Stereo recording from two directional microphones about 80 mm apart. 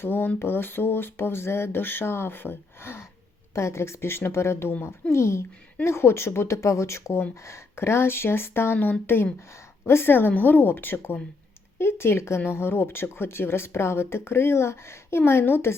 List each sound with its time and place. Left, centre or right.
0.0 s speech: left